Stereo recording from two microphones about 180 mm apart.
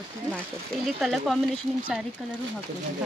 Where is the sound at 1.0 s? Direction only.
Centre (ahead or behind).